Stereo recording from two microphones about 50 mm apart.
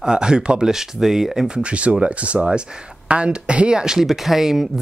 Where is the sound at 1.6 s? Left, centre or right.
Right.